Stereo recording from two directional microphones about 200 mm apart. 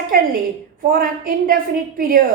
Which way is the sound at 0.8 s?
45° right (ahead or behind).